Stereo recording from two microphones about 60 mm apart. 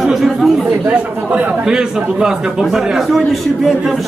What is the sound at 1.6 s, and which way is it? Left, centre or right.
Speech, centre.